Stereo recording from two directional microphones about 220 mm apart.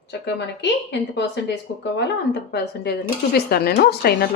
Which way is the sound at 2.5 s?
45° left (ahead or behind).